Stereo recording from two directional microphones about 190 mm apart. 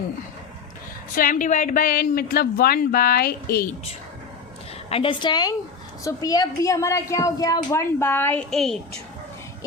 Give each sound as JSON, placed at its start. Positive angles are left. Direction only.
{"t": 1.1, "sound": "a woman's voice", "side_deg": 45}
{"t": 4.9, "sound": "a woman's voice", "side_deg": 30}